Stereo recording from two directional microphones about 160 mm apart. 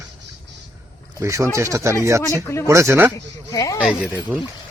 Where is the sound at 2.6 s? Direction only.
20° right (ahead or behind).